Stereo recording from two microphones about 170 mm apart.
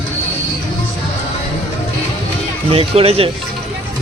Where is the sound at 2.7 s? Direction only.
35° right (ahead or behind).